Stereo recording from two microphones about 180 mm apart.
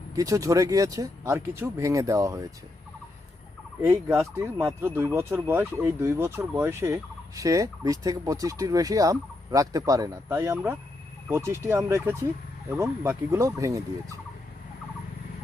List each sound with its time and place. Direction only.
0.2 s speech: 20° right (ahead or behind)
3.8 s speech: 15° right (ahead or behind)